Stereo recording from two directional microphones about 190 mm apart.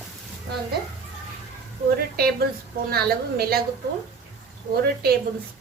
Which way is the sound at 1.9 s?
55° right (ahead or behind).